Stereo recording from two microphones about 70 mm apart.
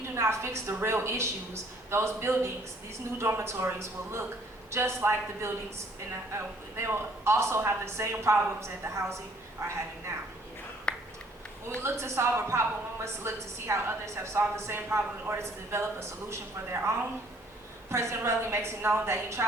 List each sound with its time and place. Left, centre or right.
0.1 s a woman's voice: right
10.9 s a sound: centre
11.8 s a woman's voice: right